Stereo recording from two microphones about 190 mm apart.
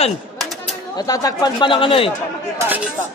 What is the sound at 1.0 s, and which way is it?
Speech, 20° left (ahead or behind).